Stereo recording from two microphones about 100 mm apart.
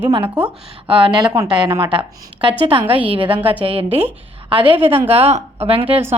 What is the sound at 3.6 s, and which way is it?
A woman's voice, 65° right (ahead or behind).